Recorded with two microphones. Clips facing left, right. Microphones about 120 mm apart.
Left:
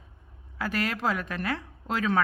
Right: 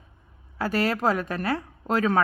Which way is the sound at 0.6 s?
35° right (ahead or behind).